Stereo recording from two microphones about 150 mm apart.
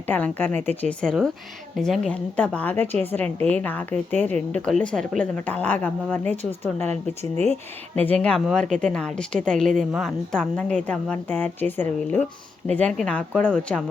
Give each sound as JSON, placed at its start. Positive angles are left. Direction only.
{"t": 0.1, "sound": "a woman's voice", "side_deg": 10}
{"t": 7.9, "sound": "a woman's voice", "side_deg": 10}